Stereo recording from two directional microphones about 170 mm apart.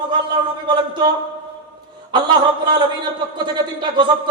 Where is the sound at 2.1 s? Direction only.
25° right (ahead or behind).